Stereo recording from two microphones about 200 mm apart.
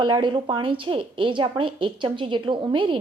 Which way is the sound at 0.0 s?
25° right (ahead or behind).